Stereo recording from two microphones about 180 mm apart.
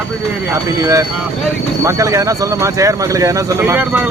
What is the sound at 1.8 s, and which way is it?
Speech, 15° right (ahead or behind).